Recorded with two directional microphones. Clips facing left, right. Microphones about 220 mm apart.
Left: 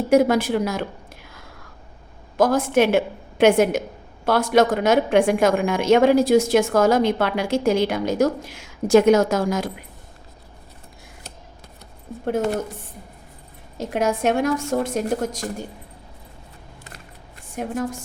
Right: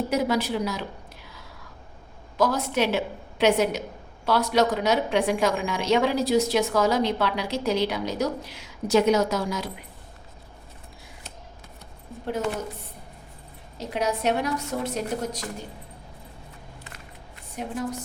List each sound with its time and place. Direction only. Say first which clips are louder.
0.1 s a woman's voice: left 11 dB; 50° left (ahead or behind)
12.2 s a woman's voice: left 6 dB; 45° left (ahead or behind)
13.7 s a woman's voice: left 5 dB; 50° left (ahead or behind)
17.6 s a woman's voice: left 4 dB; 50° left (ahead or behind)